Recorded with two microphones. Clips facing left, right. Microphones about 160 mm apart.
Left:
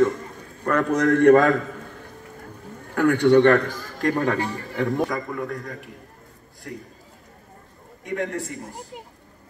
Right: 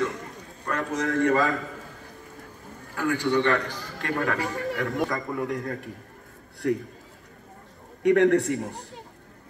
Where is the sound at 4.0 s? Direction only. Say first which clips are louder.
Left 5 dB; 40° left (ahead or behind).